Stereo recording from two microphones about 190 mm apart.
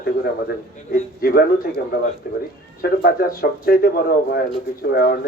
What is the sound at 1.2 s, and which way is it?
A man's voice, 50° left (ahead or behind).